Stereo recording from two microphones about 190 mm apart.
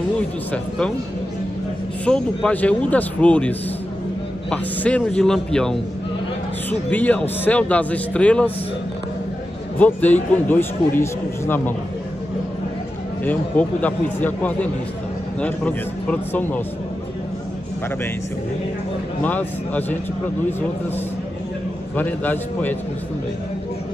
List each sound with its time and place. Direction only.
0.5 s a man's voice: 5° left (ahead or behind)
2.0 s a man's voice: 5° left (ahead or behind)
6.9 s speech: 10° left (ahead or behind)
9.8 s speech: 10° left (ahead or behind)
13.2 s speech: 10° left (ahead or behind)
19.2 s speech: 10° left (ahead or behind)
21.9 s speech: 10° left (ahead or behind)